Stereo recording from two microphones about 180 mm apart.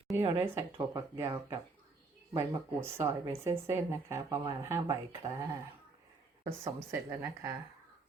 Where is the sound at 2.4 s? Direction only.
15° right (ahead or behind).